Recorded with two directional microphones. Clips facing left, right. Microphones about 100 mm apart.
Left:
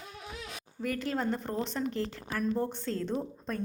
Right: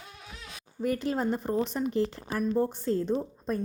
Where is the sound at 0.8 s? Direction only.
20° right (ahead or behind).